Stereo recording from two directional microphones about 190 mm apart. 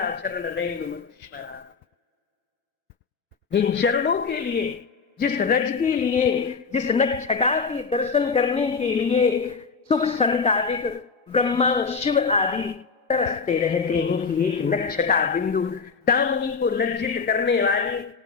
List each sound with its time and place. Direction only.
0.0 s a man's voice: 55° left (ahead or behind)
3.7 s a man's voice: 65° left (ahead or behind)